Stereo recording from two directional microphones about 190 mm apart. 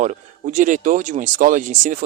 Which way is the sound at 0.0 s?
40° right (ahead or behind).